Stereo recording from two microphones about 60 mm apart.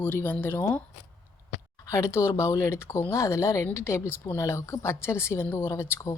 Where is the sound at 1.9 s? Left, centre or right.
Left.